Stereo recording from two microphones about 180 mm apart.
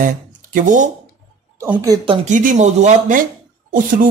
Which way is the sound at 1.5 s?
15° right (ahead or behind).